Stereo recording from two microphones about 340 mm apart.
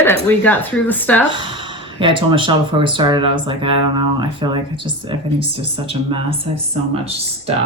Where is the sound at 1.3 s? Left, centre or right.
Centre.